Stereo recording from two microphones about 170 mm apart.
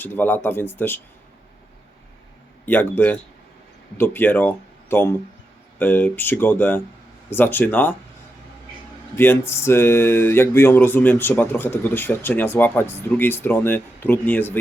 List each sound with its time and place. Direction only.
0.0 s speech: 10° left (ahead or behind)
2.6 s speech: 10° left (ahead or behind)
9.1 s speech: 15° left (ahead or behind)